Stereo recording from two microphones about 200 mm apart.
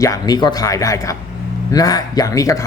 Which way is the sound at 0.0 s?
20° left (ahead or behind).